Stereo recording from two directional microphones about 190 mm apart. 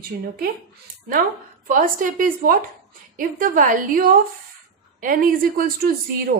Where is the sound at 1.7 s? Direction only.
45° right (ahead or behind).